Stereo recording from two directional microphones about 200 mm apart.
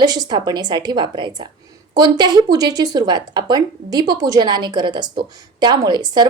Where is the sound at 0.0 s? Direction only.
20° right (ahead or behind).